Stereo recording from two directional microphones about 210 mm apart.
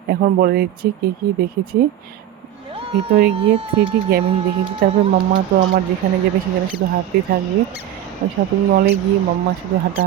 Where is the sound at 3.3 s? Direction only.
25° right (ahead or behind).